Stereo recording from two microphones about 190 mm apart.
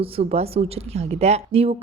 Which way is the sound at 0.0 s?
35° right (ahead or behind).